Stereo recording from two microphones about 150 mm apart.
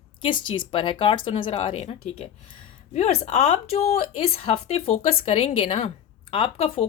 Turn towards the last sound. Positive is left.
turn(degrees=40)  # may be behind; listen again after turning